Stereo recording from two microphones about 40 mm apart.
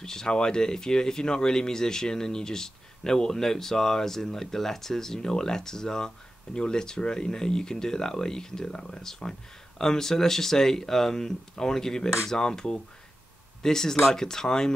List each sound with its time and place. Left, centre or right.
0.0 s speech: centre